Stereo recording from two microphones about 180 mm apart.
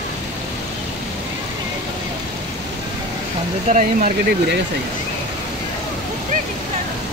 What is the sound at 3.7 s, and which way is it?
Speech, 45° right (ahead or behind).